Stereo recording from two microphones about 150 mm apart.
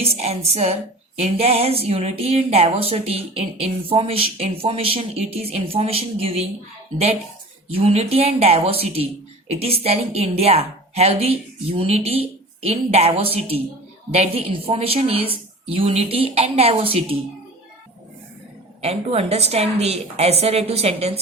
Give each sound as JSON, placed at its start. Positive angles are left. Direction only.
{"t": 0.0, "sound": "a woman's voice", "side_deg": -45}
{"t": 7.7, "sound": "a woman's voice", "side_deg": -40}
{"t": 18.8, "sound": "a woman's voice", "side_deg": -45}